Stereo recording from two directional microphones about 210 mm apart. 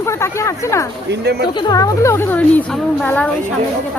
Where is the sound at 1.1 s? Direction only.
50° right (ahead or behind).